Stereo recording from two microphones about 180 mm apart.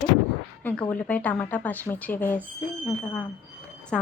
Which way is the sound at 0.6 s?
10° left (ahead or behind).